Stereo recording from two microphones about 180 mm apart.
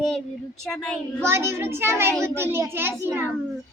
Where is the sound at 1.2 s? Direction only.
15° right (ahead or behind).